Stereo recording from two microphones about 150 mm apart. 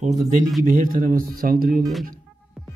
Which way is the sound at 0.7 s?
65° right (ahead or behind).